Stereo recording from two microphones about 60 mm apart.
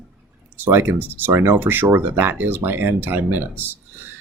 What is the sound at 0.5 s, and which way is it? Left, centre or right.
Speech, right.